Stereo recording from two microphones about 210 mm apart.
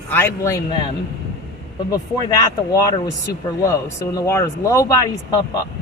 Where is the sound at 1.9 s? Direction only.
15° left (ahead or behind).